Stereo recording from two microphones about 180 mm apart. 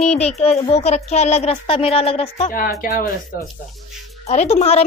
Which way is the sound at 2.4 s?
50° left (ahead or behind).